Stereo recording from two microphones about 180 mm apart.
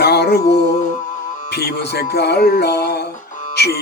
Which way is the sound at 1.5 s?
65° left (ahead or behind).